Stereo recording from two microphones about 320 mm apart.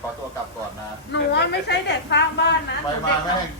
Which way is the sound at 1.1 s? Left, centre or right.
Left.